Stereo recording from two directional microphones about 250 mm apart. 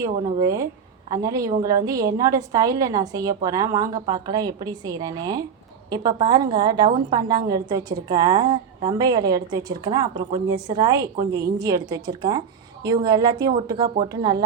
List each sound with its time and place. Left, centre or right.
0.3 s a woman's voice: centre